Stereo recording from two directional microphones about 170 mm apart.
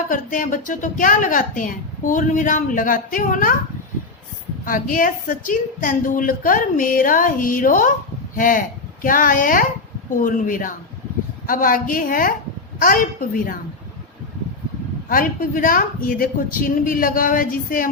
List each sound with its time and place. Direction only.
0.1 s a woman's voice: 50° left (ahead or behind)
4.6 s a woman's voice: 55° left (ahead or behind)
15.1 s a woman's voice: 55° left (ahead or behind)